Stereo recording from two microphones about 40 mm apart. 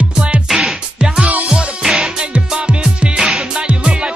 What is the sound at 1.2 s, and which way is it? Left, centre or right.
Music, right.